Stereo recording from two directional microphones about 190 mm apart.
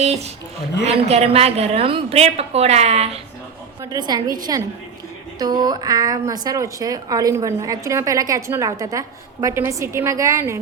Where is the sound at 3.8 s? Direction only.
20° right (ahead or behind).